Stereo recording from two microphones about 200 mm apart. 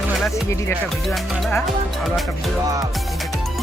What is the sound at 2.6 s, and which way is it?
Speech, 15° right (ahead or behind).